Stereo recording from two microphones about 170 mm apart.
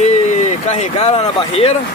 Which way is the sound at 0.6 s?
40° left (ahead or behind).